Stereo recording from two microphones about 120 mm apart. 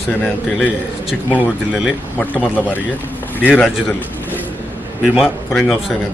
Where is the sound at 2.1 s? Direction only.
15° left (ahead or behind).